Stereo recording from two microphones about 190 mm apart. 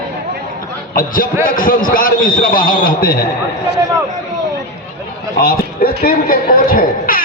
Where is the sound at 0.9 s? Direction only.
45° left (ahead or behind).